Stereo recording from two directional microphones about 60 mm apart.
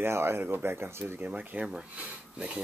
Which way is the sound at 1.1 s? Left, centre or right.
Right.